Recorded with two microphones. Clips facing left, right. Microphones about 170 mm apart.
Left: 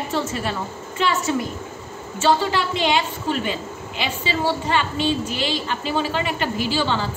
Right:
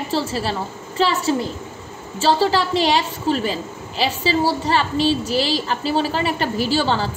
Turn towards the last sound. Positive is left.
turn(degrees=-40)  # may be behind; listen again after turning